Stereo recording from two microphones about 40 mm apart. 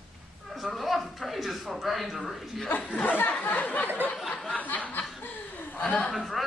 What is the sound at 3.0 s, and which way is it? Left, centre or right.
Speech, left.